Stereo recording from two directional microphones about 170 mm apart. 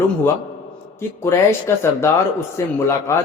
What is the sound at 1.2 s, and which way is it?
A man's voice, 15° left (ahead or behind).